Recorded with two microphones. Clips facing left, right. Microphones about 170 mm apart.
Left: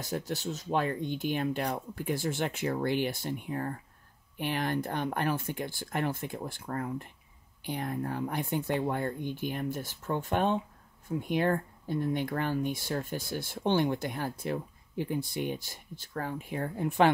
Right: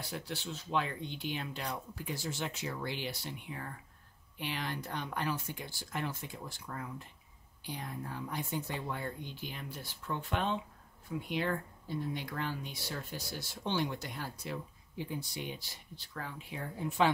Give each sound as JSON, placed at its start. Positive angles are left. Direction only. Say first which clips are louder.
{"t": 0.0, "sound": "speech", "louder": "left 7 dB", "side_deg": 45}